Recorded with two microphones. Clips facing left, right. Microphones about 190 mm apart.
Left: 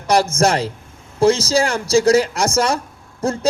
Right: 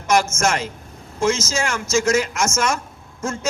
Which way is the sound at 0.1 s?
35° left (ahead or behind).